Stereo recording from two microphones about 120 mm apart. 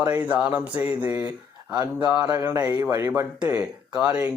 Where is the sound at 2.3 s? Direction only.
30° right (ahead or behind).